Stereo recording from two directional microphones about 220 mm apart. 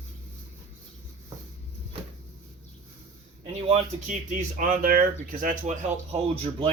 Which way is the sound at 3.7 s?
35° right (ahead or behind).